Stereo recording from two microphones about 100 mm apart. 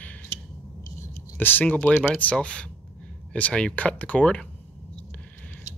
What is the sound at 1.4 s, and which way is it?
Speech, 20° left (ahead or behind).